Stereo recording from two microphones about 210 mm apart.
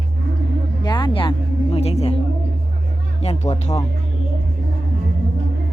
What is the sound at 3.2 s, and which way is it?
Speech, 30° left (ahead or behind).